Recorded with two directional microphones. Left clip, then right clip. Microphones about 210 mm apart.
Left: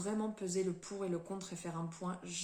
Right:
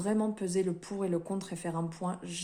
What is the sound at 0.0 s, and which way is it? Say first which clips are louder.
Speech: right 7 dB; 45° right (ahead or behind).